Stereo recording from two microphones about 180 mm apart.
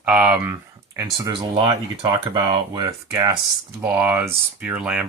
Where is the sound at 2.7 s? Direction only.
20° right (ahead or behind).